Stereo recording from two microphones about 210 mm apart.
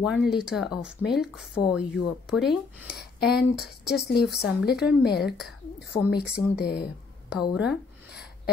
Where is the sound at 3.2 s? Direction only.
50° left (ahead or behind).